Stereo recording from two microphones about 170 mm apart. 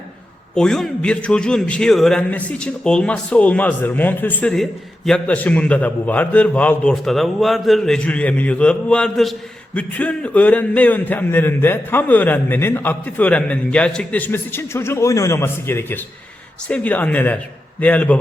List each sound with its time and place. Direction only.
0.5 s a man's voice: 5° left (ahead or behind)